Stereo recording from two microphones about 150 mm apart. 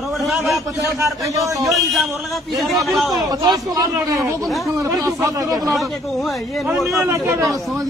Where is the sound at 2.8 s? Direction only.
Centre (ahead or behind).